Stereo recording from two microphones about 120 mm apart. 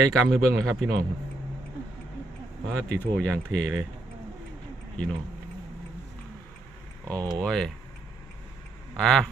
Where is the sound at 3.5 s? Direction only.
5° left (ahead or behind).